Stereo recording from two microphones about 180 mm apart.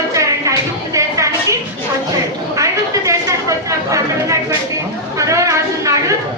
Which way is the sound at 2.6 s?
15° right (ahead or behind).